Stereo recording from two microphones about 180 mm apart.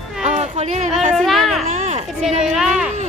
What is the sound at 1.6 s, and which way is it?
Children playing, 40° right (ahead or behind).